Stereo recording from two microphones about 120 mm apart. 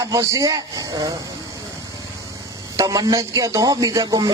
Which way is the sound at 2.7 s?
30° right (ahead or behind).